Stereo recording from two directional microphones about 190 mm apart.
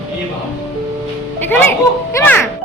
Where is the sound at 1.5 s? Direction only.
10° left (ahead or behind).